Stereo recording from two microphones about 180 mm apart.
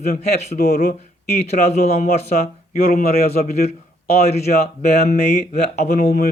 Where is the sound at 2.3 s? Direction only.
45° left (ahead or behind).